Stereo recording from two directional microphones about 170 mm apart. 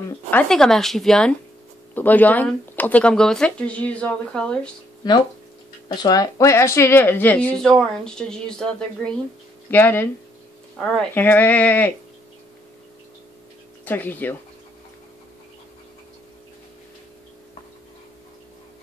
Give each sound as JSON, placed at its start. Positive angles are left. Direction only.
{"t": 0.3, "sound": "speech", "side_deg": 5}
{"t": 5.0, "sound": "speech", "side_deg": 25}
{"t": 13.8, "sound": "speech", "side_deg": 10}